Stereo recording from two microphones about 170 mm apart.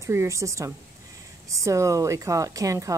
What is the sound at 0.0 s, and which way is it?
A woman's voice, 15° right (ahead or behind).